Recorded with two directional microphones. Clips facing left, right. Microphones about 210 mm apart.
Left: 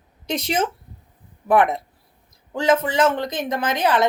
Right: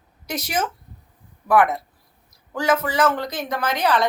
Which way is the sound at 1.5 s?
20° left (ahead or behind).